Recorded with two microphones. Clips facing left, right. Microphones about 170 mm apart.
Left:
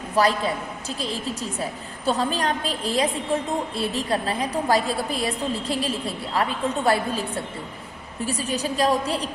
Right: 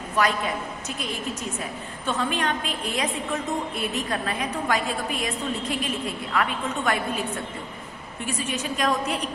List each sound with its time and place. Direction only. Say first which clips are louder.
0.2 s a woman's voice: left 3 dB; 35° left (ahead or behind)